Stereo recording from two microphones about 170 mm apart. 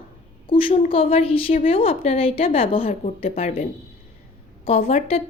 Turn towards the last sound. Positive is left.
turn(degrees=35)  # may be behind; listen again after turning